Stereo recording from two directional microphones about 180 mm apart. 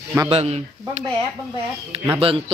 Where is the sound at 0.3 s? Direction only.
35° right (ahead or behind).